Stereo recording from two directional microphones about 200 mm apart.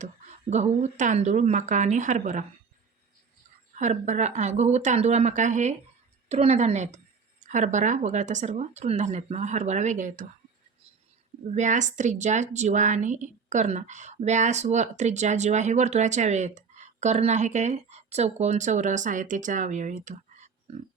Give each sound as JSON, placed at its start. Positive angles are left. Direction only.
{"t": 0.0, "sound": "a woman's voice", "side_deg": -35}
{"t": 3.8, "sound": "a woman's voice", "side_deg": -35}
{"t": 11.4, "sound": "a woman's voice", "side_deg": -35}
{"t": 20.1, "sound": "a sound", "side_deg": -35}